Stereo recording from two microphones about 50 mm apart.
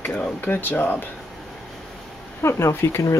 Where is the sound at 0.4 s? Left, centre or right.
Left.